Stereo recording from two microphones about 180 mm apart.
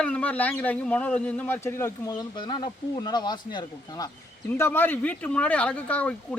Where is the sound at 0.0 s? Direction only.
10° left (ahead or behind).